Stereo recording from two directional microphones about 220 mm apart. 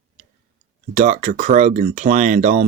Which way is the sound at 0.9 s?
35° right (ahead or behind).